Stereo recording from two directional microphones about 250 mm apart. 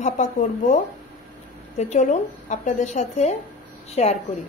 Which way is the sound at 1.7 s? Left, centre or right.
Left.